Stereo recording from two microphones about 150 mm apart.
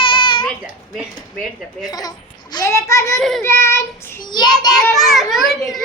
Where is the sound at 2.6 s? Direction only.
20° left (ahead or behind).